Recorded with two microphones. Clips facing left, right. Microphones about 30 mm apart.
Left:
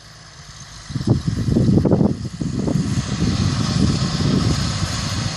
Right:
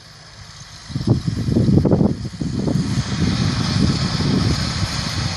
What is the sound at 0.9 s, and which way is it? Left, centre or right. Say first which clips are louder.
Vehicle: even; centre.